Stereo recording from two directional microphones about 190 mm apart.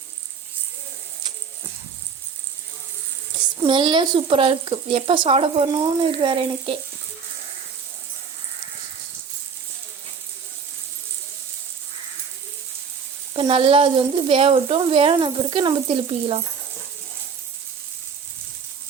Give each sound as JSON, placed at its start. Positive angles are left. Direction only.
{"t": 3.7, "sound": "speech", "side_deg": -25}
{"t": 13.3, "sound": "speech", "side_deg": -30}